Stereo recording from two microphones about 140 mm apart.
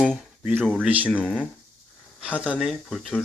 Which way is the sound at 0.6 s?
5° right (ahead or behind).